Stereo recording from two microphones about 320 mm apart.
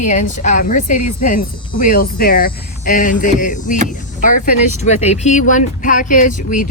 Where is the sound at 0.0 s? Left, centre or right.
Left.